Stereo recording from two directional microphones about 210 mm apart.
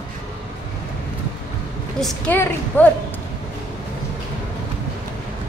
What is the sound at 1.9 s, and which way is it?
Speech, 5° left (ahead or behind).